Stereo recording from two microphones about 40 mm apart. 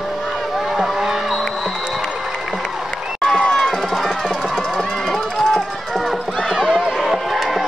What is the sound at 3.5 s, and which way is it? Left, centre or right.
Run, centre.